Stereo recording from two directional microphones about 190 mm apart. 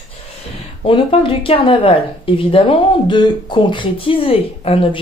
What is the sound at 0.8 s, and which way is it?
Speech, 30° left (ahead or behind).